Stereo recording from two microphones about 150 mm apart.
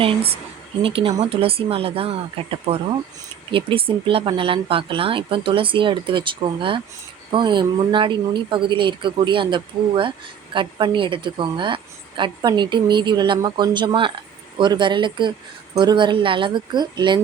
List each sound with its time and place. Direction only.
0.0 s a woman's voice: 40° right (ahead or behind)
3.5 s a woman's voice: 35° right (ahead or behind)